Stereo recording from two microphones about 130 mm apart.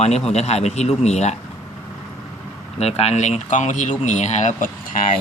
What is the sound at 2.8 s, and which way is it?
Speech, 55° left (ahead or behind).